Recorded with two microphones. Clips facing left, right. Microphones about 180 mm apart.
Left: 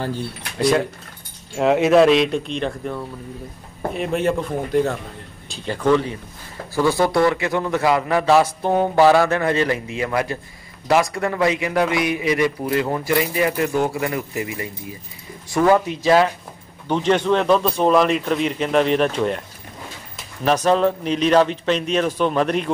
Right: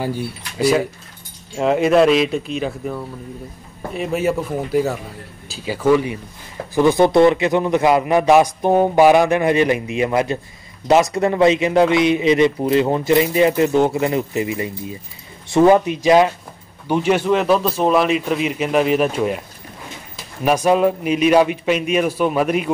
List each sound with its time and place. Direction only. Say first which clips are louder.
0.0 s a man's voice: right 2 dB; 10° right (ahead or behind)
20.4 s a man's voice: right 2 dB; 10° right (ahead or behind)